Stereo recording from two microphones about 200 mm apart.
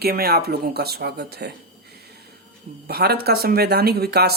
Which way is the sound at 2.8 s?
50° right (ahead or behind).